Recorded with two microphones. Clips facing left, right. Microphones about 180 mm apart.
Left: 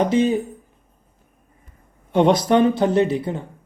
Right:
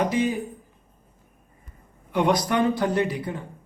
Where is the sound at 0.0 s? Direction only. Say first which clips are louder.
Left 5 dB; 25° left (ahead or behind).